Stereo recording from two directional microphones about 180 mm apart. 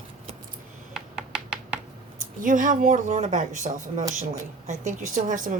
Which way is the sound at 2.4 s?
45° right (ahead or behind).